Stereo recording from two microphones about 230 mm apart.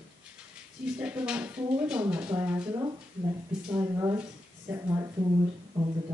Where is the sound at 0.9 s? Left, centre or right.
Centre.